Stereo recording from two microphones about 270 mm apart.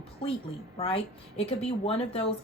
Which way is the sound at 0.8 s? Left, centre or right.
Left.